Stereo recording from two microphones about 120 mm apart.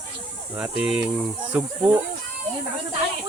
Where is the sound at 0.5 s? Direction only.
10° right (ahead or behind).